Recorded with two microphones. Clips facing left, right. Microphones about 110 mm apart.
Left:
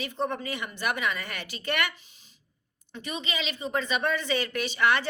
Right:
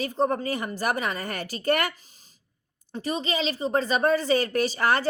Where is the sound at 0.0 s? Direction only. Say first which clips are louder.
Right 6 dB; 40° right (ahead or behind).